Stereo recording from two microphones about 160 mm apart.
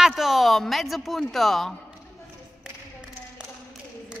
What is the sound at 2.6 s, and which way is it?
Tap, 5° right (ahead or behind).